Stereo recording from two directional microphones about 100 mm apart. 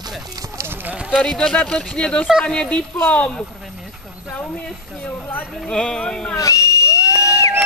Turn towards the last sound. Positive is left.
turn(degrees=30)  # may be behind; listen again after turning